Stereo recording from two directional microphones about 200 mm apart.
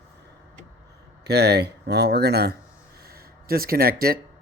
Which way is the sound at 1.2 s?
55° right (ahead or behind).